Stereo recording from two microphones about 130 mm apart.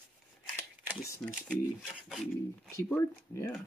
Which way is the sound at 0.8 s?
10° right (ahead or behind).